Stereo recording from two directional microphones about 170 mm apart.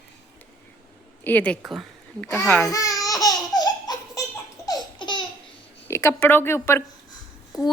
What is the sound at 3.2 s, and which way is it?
Laughter, 25° left (ahead or behind).